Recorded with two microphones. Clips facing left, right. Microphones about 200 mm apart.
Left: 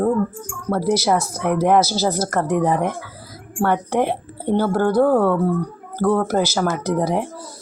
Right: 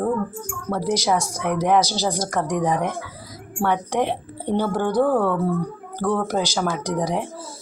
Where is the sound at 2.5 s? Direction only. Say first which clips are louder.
Left 3 dB; 55° left (ahead or behind).